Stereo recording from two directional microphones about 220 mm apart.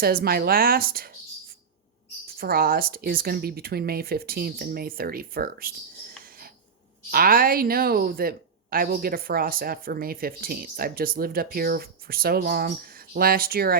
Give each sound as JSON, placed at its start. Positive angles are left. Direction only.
{"t": 0.0, "sound": "speech", "side_deg": -45}
{"t": 2.4, "sound": "speech", "side_deg": -40}
{"t": 7.1, "sound": "speech", "side_deg": -40}